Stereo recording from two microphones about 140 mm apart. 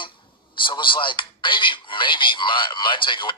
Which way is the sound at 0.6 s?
35° left (ahead or behind).